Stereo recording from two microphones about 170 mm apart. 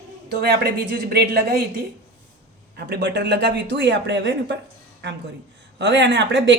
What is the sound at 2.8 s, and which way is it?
Speech, 85° right.